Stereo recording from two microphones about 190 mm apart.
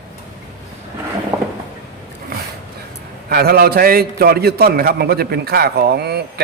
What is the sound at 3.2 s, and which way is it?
A man's voice, 55° right (ahead or behind).